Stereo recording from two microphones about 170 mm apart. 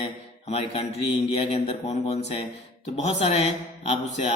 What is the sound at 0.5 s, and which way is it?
Mantra, 35° left (ahead or behind).